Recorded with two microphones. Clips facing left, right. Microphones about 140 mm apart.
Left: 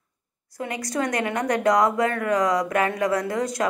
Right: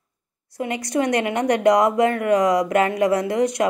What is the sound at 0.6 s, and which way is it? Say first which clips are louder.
Speech: right 4 dB; 20° right (ahead or behind).